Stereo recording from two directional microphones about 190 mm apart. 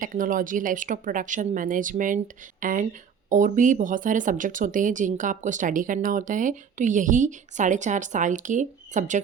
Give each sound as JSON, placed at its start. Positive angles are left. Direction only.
{"t": 0.0, "sound": "speech", "side_deg": -45}